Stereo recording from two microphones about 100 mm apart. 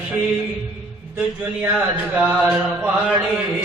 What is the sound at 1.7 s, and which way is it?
Mantra, 15° right (ahead or behind).